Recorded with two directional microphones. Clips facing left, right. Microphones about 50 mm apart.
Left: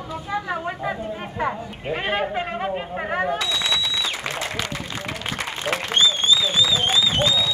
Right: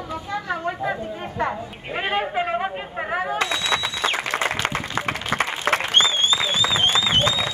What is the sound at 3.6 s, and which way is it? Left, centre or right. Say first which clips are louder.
Applause: right 2 dB; right.